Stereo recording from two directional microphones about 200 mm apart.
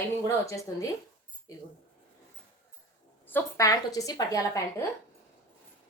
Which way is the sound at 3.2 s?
15° left (ahead or behind).